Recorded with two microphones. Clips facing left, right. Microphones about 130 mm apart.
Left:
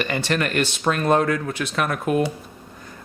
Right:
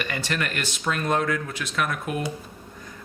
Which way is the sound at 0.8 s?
45° left (ahead or behind).